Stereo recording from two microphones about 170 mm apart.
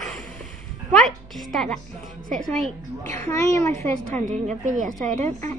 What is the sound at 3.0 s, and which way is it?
Speech, 20° left (ahead or behind).